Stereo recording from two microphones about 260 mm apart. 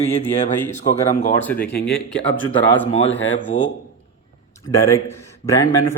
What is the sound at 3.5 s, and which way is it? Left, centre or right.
Speech, centre.